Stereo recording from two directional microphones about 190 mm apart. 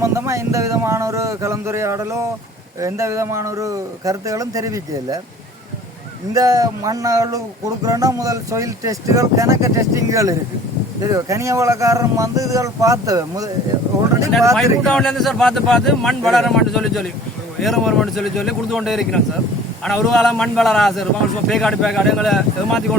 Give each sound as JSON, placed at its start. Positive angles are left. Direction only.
{"t": 0.0, "sound": "speech", "side_deg": -15}
{"t": 6.3, "sound": "speech", "side_deg": -20}
{"t": 14.5, "sound": "a man's voice", "side_deg": 0}